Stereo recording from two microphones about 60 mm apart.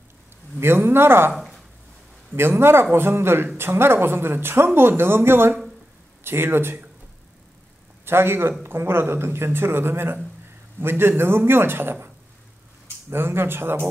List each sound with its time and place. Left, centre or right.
0.6 s a man's voice: right
1.3 s a sound: centre
2.3 s a man's voice: right
8.0 s a man's voice: right
13.1 s a man's voice: right